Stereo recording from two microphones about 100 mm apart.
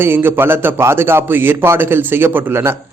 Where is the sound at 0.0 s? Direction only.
20° right (ahead or behind).